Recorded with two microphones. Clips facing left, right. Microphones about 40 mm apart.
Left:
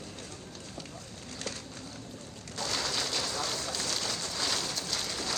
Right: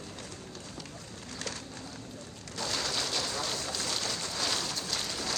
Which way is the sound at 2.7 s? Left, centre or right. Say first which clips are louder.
Left 1 dB; left.